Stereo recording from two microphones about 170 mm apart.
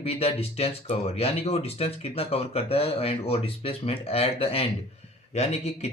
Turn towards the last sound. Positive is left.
turn(degrees=40)  # may be behind; listen again after turning